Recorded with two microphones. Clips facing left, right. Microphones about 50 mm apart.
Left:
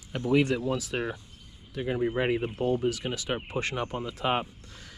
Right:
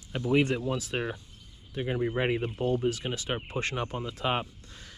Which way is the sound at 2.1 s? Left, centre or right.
Right.